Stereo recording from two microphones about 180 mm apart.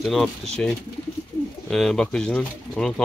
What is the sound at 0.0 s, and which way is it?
Speech, centre (ahead or behind).